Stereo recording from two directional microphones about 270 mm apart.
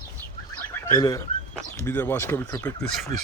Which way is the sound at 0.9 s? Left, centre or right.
Centre.